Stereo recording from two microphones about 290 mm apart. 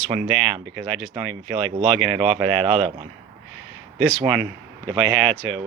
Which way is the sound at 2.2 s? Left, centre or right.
Centre.